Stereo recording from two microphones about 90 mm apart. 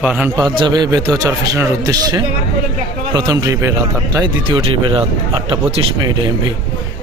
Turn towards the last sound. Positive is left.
turn(degrees=-55)  # may be behind; listen again after turning